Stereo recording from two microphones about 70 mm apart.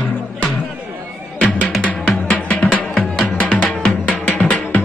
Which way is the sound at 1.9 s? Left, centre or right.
Left.